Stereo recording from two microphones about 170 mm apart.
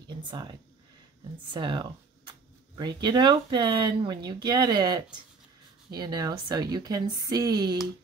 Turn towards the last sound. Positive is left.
turn(degrees=-25)  # may be behind; listen again after turning